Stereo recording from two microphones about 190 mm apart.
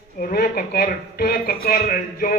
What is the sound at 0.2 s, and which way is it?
Speech, 50° left (ahead or behind).